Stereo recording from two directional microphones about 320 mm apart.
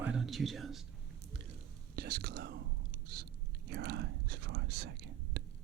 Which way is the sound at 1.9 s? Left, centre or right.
Right.